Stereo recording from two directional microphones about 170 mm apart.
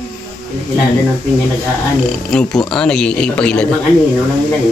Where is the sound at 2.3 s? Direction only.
5° left (ahead or behind).